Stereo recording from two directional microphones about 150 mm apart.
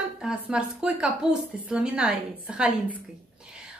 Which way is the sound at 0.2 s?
5° right (ahead or behind).